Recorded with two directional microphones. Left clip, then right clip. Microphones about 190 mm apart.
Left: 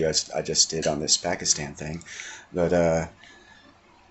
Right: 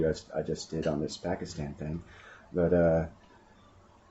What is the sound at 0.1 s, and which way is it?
Speech, 5° right (ahead or behind).